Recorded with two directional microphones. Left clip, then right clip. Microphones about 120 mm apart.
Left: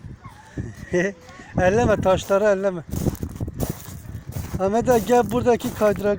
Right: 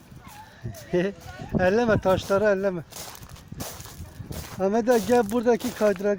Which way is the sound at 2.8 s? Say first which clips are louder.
Left 11 dB; 90° left.